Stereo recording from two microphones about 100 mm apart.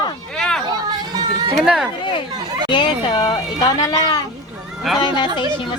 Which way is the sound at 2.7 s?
50° left (ahead or behind).